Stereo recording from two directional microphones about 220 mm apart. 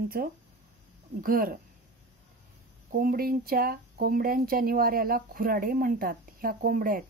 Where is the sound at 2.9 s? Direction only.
40° right (ahead or behind).